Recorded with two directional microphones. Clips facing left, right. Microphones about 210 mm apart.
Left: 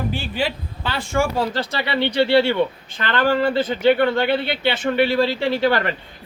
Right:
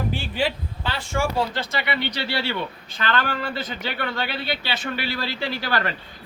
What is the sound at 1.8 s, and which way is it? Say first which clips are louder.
Speech: left 12 dB; 30° left (ahead or behind).